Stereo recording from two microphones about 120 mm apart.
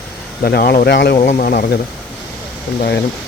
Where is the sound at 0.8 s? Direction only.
80° left.